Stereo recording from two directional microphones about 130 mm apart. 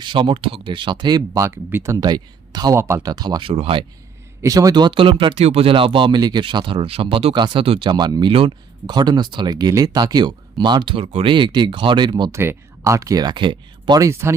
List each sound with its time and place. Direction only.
0.0 s speech: 40° right (ahead or behind)
2.7 s speech: 20° right (ahead or behind); by 3.8 s 45° right (ahead or behind)
4.4 s speech: 25° right (ahead or behind)
8.3 s speech: 45° right (ahead or behind)
8.9 s speech: 35° right (ahead or behind)
12.3 s speech: 20° right (ahead or behind); by 14.0 s 35° right (ahead or behind)
14.0 s speech: 20° right (ahead or behind)